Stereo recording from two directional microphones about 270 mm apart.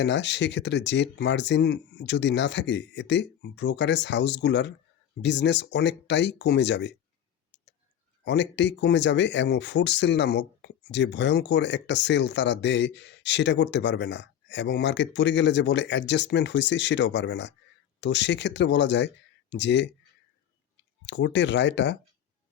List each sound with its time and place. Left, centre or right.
0.0 s speech: left
8.2 s speech: left
21.1 s speech: left